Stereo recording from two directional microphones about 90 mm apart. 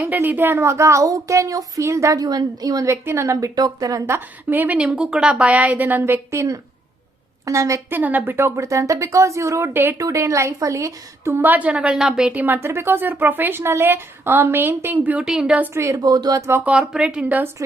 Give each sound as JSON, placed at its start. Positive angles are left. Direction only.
{"t": 0.0, "sound": "a woman's voice", "side_deg": -20}
{"t": 2.9, "sound": "a woman's voice", "side_deg": -30}
{"t": 4.1, "sound": "a woman's voice", "side_deg": -20}
{"t": 6.3, "sound": "a woman's voice", "side_deg": -30}
{"t": 7.9, "sound": "a woman's voice", "side_deg": -20}
{"t": 11.4, "sound": "a woman's voice", "side_deg": -15}
{"t": 12.3, "sound": "speech", "side_deg": -20}
{"t": 15.2, "sound": "a woman's voice", "side_deg": -10}
{"t": 15.7, "sound": "a woman's voice", "side_deg": -30}
{"t": 16.0, "sound": "speech", "side_deg": -45}
{"t": 16.5, "sound": "speech", "side_deg": -20}
{"t": 16.8, "sound": "a woman's voice", "side_deg": -10}